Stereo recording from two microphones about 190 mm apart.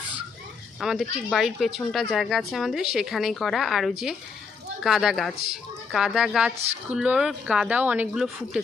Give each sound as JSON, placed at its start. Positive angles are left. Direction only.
{"t": 0.7, "sound": "speech", "side_deg": 0}
{"t": 6.5, "sound": "a woman's voice", "side_deg": -35}
{"t": 6.9, "sound": "speech", "side_deg": -5}